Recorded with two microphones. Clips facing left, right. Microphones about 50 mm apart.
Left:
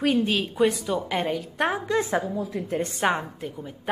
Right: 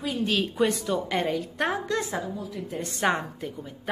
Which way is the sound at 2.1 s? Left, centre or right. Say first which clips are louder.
Left 5 dB; left.